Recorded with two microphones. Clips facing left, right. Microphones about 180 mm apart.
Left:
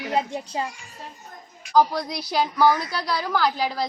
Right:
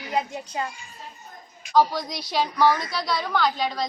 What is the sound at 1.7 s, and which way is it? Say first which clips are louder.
A woman's voice: left 1 dB; 5° left (ahead or behind).